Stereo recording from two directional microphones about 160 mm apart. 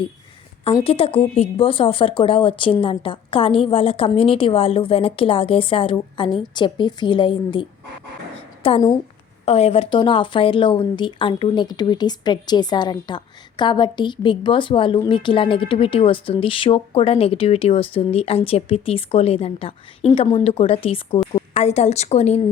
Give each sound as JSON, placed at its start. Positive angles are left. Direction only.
{"t": 0.9, "sound": "a woman's voice", "side_deg": 35}